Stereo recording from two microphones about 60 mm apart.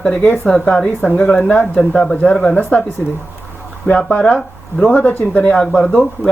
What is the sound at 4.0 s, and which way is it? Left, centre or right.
Speech, centre.